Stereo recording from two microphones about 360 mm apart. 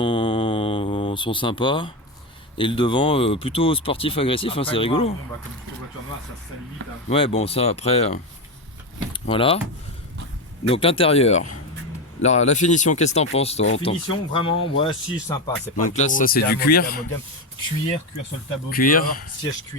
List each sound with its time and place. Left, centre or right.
0.0 s mantra: centre
2.6 s speech: centre
7.1 s speech: centre
10.7 s speech: centre
18.7 s speech: left